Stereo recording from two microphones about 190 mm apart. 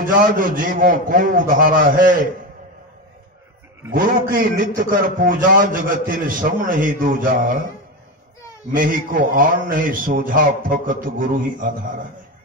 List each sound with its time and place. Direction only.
0.0 s a man's voice: 45° right (ahead or behind)
3.9 s a man's voice: 50° right (ahead or behind)
8.7 s a man's voice: 45° right (ahead or behind)